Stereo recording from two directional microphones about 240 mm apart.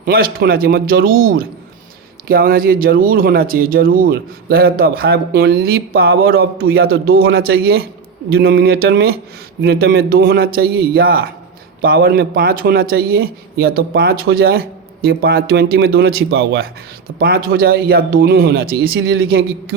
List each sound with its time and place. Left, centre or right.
0.0 s speech: right